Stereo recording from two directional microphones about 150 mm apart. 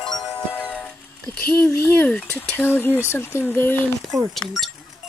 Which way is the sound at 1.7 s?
10° left (ahead or behind).